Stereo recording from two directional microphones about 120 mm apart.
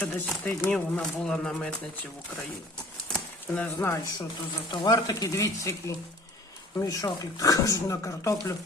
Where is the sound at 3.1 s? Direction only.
10° left (ahead or behind).